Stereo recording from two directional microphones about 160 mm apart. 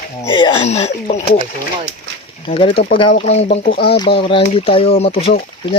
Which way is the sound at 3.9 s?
30° left (ahead or behind).